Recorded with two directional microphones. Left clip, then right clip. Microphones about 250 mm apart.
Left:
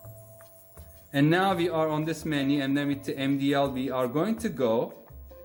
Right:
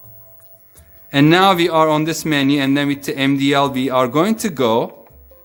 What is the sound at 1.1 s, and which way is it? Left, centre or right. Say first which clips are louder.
Speech: right 12 dB; right.